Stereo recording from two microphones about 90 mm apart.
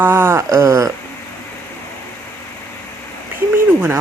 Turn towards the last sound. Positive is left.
turn(degrees=-25)  # may be behind; listen again after turning